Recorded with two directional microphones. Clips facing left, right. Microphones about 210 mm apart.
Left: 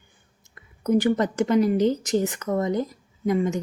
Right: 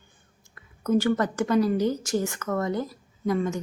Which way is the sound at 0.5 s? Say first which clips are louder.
Left 2 dB; 15° left (ahead or behind).